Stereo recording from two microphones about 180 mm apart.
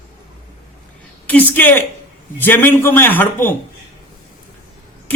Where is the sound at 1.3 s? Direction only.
10° left (ahead or behind).